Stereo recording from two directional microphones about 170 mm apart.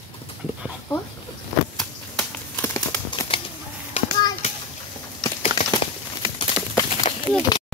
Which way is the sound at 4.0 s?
35° left (ahead or behind).